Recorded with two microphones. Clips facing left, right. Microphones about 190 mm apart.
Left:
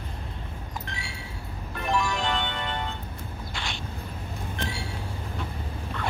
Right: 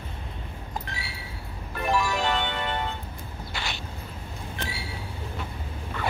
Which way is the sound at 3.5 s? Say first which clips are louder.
Right 1 dB; 5° right (ahead or behind).